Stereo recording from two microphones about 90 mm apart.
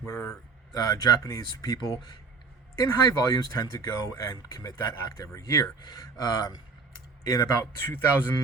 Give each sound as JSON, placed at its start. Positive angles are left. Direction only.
{"t": 0.7, "sound": "speech", "side_deg": 45}
{"t": 7.6, "sound": "speech", "side_deg": 25}